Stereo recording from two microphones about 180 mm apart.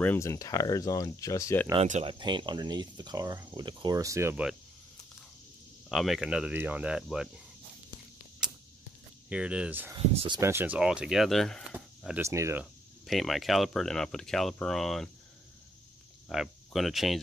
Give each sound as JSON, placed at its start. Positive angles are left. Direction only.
{"t": 0.0, "sound": "speech", "side_deg": 15}
{"t": 1.9, "sound": "speech", "side_deg": -40}
{"t": 2.1, "sound": "speech", "side_deg": -25}
{"t": 5.9, "sound": "speech", "side_deg": 0}
{"t": 9.3, "sound": "speech", "side_deg": -5}
{"t": 9.9, "sound": "speech", "side_deg": -30}
{"t": 10.4, "sound": "speech", "side_deg": -10}
{"t": 11.7, "sound": "a sound", "side_deg": -5}
{"t": 12.2, "sound": "speech", "side_deg": -15}
{"t": 13.0, "sound": "speech", "side_deg": 0}
{"t": 16.3, "sound": "speech", "side_deg": 0}